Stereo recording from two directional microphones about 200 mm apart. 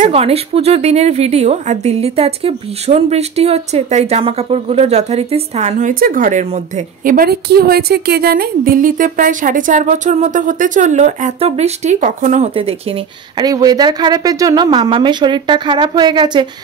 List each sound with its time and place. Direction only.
0.0 s a woman's voice: 30° right (ahead or behind)